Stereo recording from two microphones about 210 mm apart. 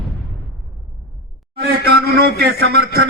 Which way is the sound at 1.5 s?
50° right (ahead or behind).